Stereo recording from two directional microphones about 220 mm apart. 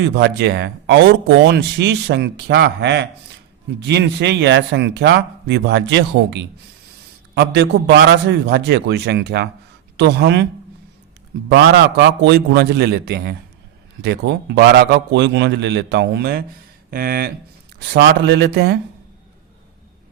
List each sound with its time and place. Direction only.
0.0 s speech: 50° right (ahead or behind)
11.4 s speech: 50° right (ahead or behind)